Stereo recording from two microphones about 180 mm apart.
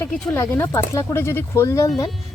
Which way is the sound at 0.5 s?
15° left (ahead or behind).